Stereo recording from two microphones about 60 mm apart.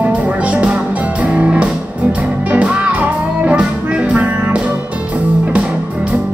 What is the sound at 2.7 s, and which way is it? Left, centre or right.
Music, right.